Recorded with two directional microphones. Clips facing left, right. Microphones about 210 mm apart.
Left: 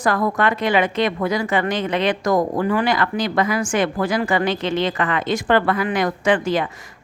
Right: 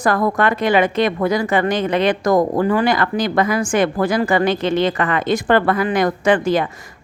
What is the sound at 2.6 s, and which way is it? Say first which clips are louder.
A woman's voice: right 3 dB; 35° right (ahead or behind).